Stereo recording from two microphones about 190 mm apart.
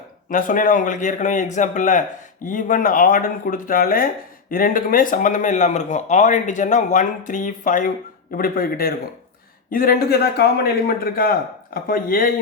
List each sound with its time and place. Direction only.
0.3 s a man's voice: 45° left (ahead or behind)